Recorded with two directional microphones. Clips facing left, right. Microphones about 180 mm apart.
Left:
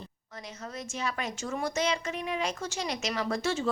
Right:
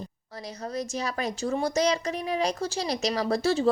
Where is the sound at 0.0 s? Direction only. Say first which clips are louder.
Right 5 dB; 35° right (ahead or behind).